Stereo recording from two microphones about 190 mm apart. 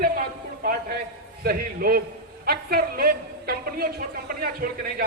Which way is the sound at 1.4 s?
50° right (ahead or behind).